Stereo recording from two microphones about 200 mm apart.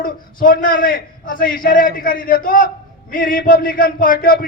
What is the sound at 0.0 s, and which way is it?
A man's voice, 45° left (ahead or behind).